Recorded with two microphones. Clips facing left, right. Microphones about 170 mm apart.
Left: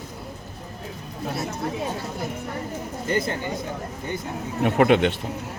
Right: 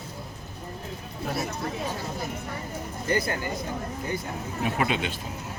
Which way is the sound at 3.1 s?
20° left (ahead or behind).